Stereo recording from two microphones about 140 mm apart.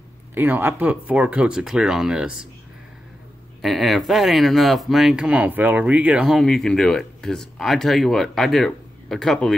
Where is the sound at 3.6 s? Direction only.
Centre (ahead or behind).